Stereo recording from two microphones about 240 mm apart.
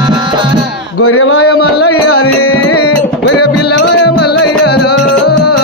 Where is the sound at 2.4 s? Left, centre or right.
Left.